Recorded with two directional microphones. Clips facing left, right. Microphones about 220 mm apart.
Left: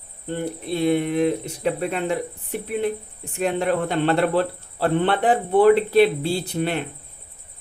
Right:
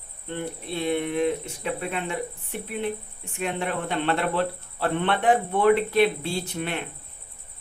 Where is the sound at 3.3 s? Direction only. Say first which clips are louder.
Left 7 dB; 40° left (ahead or behind).